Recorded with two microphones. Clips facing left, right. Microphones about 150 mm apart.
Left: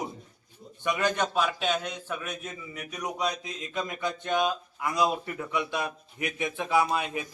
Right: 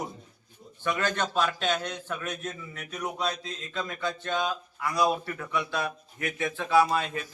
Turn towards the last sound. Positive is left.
turn(degrees=15)  # may be behind; listen again after turning